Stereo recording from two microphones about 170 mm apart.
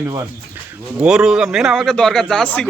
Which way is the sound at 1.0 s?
5° right (ahead or behind).